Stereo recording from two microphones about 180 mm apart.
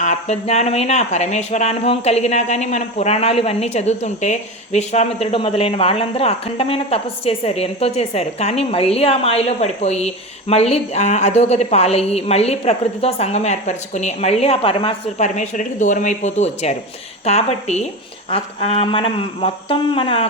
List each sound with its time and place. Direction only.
0.0 s speech: 40° left (ahead or behind)